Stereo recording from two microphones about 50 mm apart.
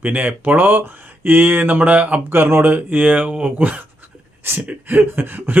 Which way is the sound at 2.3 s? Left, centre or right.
Right.